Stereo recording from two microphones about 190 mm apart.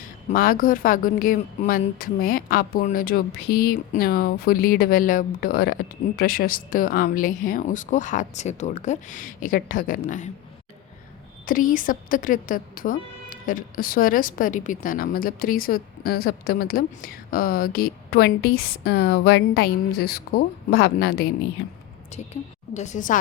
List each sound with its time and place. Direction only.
0.3 s speech: 50° left (ahead or behind)
11.4 s speech: 45° left (ahead or behind)
22.1 s a woman's voice: 35° left (ahead or behind)